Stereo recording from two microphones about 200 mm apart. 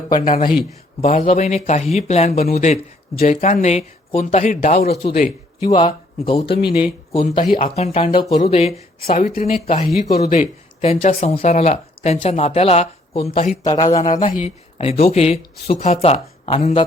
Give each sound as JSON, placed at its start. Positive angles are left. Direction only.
{"t": 0.3, "sound": "speech", "side_deg": 40}